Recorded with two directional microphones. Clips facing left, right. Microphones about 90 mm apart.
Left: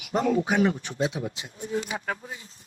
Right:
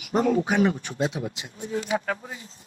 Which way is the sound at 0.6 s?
45° right (ahead or behind).